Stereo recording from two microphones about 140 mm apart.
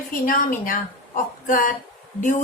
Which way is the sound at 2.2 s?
65° left (ahead or behind).